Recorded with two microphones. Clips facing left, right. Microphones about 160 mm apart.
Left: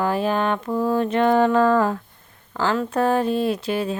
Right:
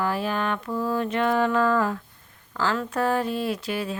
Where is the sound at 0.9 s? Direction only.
30° left (ahead or behind).